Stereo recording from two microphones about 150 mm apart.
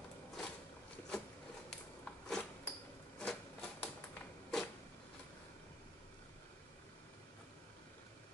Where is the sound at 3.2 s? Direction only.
5° left (ahead or behind).